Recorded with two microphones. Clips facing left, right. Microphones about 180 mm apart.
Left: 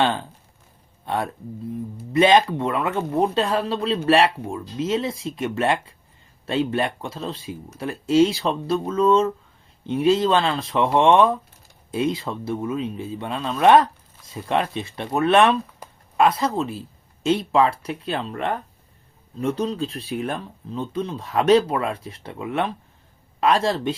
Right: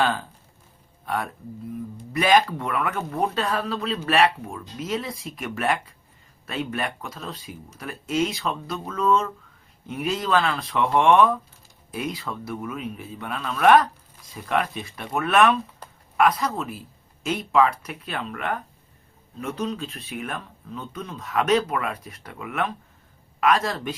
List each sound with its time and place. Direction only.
0.0 s speech: 25° left (ahead or behind)
15.8 s a sound: 10° left (ahead or behind)
16.1 s speech: 25° left (ahead or behind)